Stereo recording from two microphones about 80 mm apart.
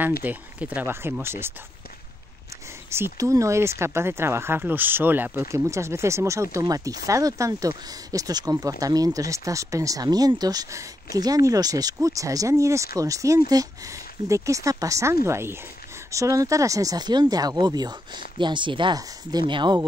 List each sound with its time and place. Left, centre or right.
0.0 s speech: right
1.2 s speech: right
2.9 s speech: right
5.7 s speech: right